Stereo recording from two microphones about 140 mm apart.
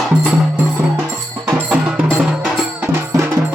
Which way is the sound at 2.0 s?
Centre (ahead or behind).